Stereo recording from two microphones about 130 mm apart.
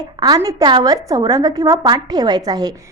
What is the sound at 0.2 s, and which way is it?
A woman's voice, 30° right (ahead or behind).